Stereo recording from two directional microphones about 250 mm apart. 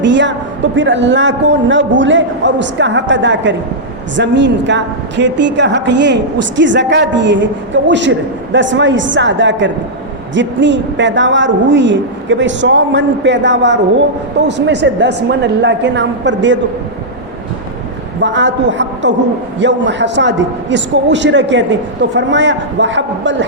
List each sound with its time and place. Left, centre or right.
0.0 s a woman's voice: right
18.2 s a woman's voice: right